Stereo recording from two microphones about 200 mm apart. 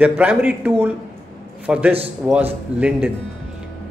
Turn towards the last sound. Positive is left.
turn(degrees=-5)  # may be behind; listen again after turning